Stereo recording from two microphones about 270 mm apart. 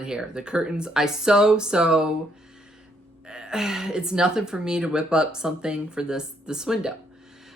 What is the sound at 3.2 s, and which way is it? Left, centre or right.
Speech, centre.